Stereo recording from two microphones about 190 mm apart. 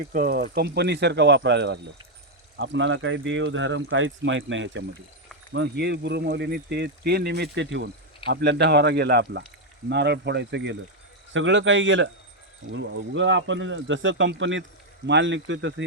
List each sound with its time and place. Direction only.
0.1 s speech: 50° right (ahead or behind)
0.5 s speech: 60° right (ahead or behind)
2.6 s speech: 75° right (ahead or behind)
5.5 s speech: 65° right (ahead or behind)
11.3 s speech: 80° right